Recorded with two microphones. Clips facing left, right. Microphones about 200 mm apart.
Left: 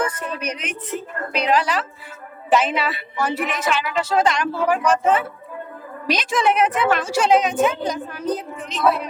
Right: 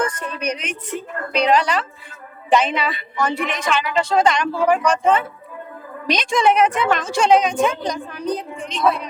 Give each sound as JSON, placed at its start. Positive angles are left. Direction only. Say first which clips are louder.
{"t": 0.3, "sound": "a woman's voice", "louder": "right 3 dB", "side_deg": 0}